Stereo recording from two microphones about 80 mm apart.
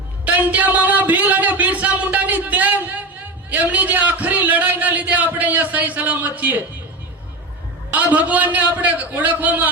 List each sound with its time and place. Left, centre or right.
0.3 s a sound: centre
3.5 s a man's voice: centre
7.9 s a man's voice: right